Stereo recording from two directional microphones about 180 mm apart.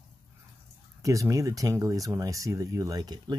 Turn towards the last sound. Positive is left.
turn(degrees=-25)  # may be behind; listen again after turning